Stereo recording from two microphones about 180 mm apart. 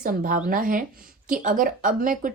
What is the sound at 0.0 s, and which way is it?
A woman's voice, 50° right (ahead or behind).